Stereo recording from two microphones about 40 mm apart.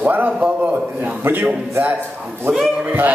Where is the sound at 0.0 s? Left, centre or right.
Right.